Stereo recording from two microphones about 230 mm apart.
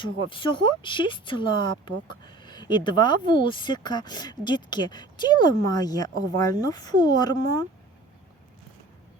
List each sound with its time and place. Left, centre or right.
0.0 s speech: left